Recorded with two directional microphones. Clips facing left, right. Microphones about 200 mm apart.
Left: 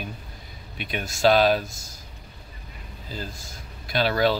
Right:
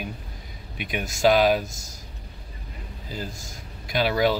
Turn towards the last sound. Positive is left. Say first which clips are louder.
# even
turn(degrees=-15)  # may be behind; listen again after turning